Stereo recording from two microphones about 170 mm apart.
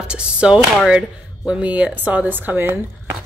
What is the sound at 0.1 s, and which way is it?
A woman's voice, 5° right (ahead or behind).